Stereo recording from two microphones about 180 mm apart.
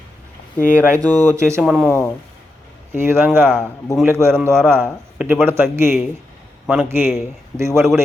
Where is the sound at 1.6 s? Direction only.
5° right (ahead or behind).